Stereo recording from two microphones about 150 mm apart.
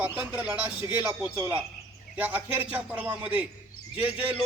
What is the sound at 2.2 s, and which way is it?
A man's voice, 10° right (ahead or behind).